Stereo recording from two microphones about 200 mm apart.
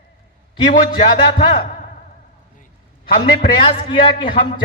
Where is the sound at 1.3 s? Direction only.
25° left (ahead or behind).